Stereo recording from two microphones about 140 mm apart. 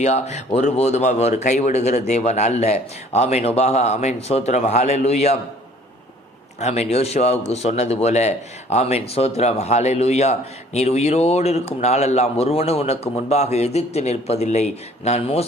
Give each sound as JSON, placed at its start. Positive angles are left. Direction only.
{"t": 0.0, "sound": "speech", "side_deg": 55}
{"t": 6.6, "sound": "speech", "side_deg": 50}